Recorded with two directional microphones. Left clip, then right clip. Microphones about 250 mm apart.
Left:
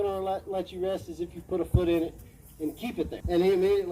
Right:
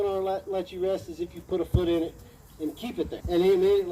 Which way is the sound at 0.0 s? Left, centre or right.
Left.